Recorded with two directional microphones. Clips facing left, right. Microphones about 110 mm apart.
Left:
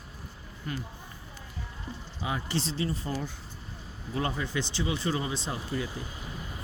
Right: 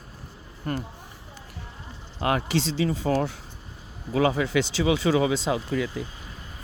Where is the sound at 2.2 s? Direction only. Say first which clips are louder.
Right 8 dB; 70° right (ahead or behind); by 6.0 s 90° right.